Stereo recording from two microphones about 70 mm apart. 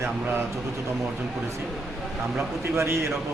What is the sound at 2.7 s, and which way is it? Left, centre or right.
Speech, right.